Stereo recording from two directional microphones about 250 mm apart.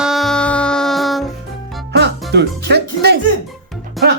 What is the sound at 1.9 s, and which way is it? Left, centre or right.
Music, right.